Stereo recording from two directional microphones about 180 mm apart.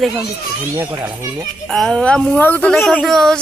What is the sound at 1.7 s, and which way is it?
A woman's voice, centre (ahead or behind).